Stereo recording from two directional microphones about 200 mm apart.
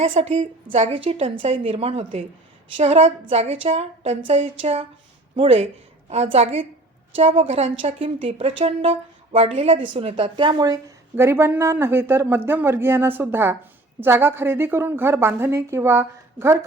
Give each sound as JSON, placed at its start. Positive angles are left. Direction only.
{"t": 0.0, "sound": "a woman's voice", "side_deg": -30}